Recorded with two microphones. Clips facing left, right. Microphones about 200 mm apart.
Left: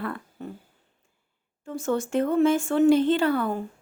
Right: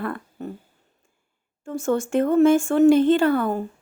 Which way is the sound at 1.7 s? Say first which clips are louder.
Right 3 dB; 50° right (ahead or behind).